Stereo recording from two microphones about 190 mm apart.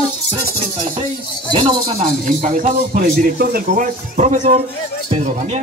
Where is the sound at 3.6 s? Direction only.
40° right (ahead or behind).